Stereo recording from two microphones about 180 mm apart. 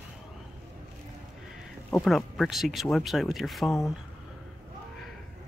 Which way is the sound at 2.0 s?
Centre (ahead or behind).